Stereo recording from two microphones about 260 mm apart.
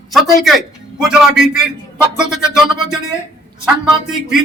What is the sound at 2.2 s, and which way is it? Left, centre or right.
Speech, centre.